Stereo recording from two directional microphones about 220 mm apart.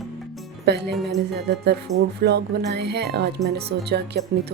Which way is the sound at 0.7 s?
50° right (ahead or behind).